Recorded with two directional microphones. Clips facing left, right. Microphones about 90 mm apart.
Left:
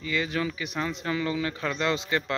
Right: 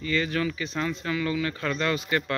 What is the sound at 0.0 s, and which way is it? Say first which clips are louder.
Speech: right 2 dB; 15° left (ahead or behind).